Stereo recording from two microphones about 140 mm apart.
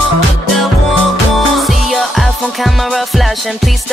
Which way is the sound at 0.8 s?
Centre (ahead or behind).